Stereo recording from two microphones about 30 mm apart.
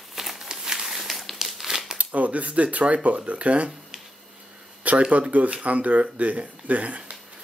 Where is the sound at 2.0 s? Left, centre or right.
Right.